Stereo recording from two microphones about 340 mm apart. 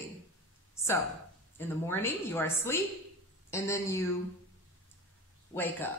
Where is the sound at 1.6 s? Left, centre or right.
Centre.